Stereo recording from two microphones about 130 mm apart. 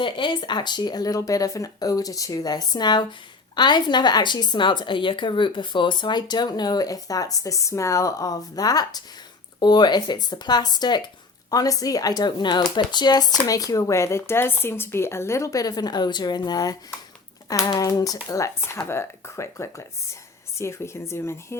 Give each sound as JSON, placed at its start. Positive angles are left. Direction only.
{"t": 0.0, "sound": "a woman's voice", "side_deg": 40}